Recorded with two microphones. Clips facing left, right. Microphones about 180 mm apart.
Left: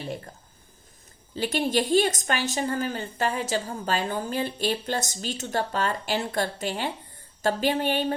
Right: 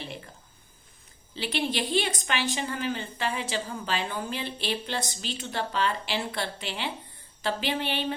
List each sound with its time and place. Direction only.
1.4 s a woman's voice: 45° left (ahead or behind)